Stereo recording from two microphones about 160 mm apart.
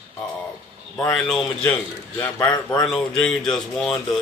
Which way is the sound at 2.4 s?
25° left (ahead or behind).